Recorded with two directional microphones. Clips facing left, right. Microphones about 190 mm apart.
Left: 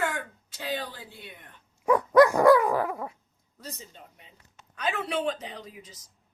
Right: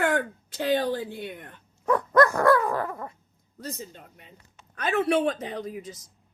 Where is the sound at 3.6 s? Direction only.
55° right (ahead or behind).